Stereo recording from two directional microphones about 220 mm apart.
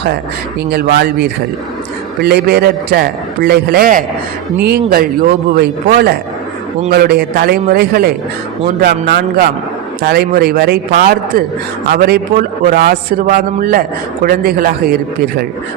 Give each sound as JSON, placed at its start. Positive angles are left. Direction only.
{"t": 0.7, "sound": "a man's voice", "side_deg": -45}